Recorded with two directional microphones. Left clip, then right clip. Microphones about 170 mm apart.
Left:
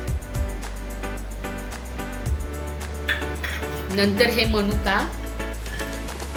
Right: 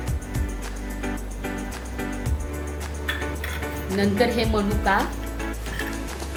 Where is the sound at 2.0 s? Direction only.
Centre (ahead or behind).